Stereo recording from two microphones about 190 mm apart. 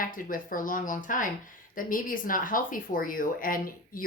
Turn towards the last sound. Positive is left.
turn(degrees=45)  # may be behind; listen again after turning